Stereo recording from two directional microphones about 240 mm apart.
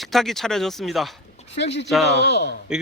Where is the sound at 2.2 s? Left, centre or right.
Left.